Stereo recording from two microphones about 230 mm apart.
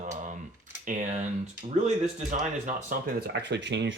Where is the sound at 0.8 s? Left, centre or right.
Right.